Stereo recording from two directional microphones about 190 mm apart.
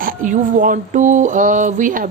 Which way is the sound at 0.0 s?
45° right (ahead or behind).